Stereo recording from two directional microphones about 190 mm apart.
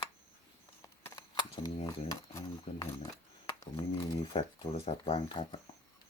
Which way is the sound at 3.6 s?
25° left (ahead or behind).